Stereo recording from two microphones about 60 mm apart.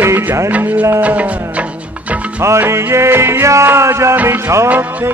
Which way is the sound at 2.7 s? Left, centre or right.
Right.